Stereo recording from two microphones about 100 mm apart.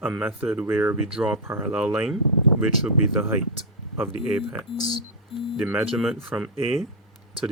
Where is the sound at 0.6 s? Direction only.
25° right (ahead or behind).